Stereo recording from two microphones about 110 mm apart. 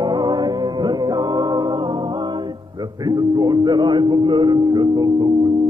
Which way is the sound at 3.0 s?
40° right (ahead or behind).